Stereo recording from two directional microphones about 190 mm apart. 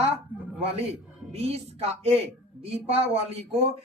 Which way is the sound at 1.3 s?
30° right (ahead or behind).